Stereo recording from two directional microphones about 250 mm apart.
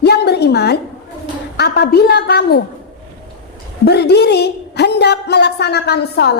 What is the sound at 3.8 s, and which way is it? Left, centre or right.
A woman's voice, left.